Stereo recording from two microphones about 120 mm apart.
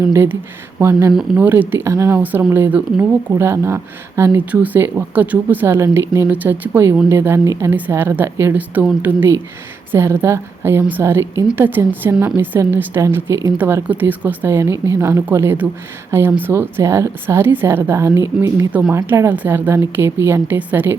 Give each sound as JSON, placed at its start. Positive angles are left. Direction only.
{"t": 0.1, "sound": "a woman's voice", "side_deg": -20}